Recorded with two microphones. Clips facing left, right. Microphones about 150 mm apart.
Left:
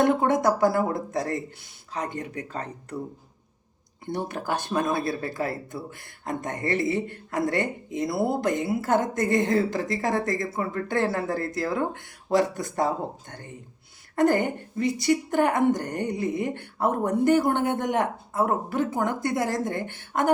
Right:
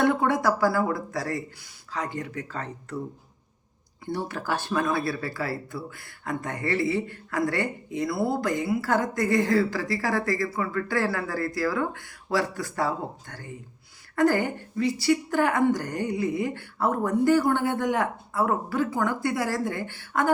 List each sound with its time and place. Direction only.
0.3 s speech: 20° left (ahead or behind)
4.0 s speech: 20° left (ahead or behind)